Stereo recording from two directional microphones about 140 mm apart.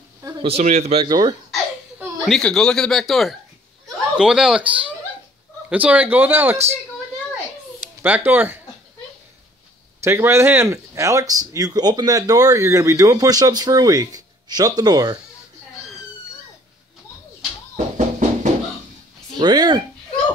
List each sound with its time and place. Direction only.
0.2 s speech: 30° right (ahead or behind)
0.5 s speech: 50° right (ahead or behind)
1.0 s speech: 30° right (ahead or behind)
2.2 s speech: 5° left (ahead or behind)
5.7 s speech: 10° right (ahead or behind)
8.0 s speech: 15° right (ahead or behind)
10.0 s speech: 20° right (ahead or behind)
17.7 s music: 60° right (ahead or behind)
19.3 s speech: 30° right (ahead or behind)